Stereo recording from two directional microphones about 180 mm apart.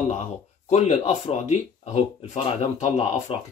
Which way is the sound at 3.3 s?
30° left (ahead or behind).